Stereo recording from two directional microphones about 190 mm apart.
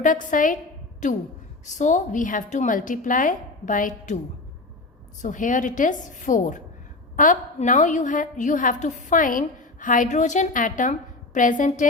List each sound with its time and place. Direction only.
0.0 s a woman's voice: 45° left (ahead or behind)
5.2 s a woman's voice: 40° left (ahead or behind)